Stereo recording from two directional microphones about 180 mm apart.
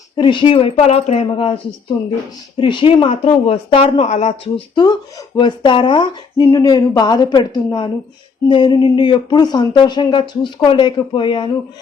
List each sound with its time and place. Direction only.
0.2 s a woman's voice: 25° left (ahead or behind)
2.6 s speech: 25° left (ahead or behind)